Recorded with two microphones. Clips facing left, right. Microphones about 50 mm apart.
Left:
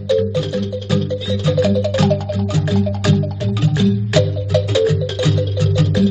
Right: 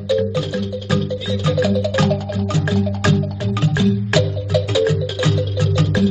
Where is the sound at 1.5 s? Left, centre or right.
Centre.